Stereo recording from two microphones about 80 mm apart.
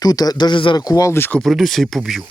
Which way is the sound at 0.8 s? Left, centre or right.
Left.